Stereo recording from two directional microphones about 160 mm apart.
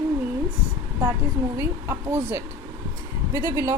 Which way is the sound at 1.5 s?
15° right (ahead or behind).